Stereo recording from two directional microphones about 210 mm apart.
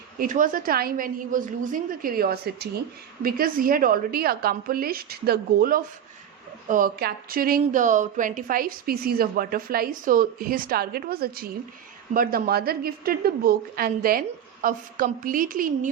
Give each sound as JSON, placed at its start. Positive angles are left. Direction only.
{"t": 0.2, "sound": "a woman's voice", "side_deg": -40}